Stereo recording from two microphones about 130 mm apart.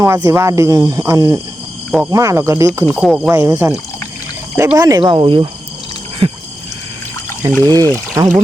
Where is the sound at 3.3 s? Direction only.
25° right (ahead or behind).